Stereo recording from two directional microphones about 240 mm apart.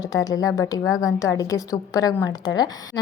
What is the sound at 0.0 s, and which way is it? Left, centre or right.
A woman's voice, centre.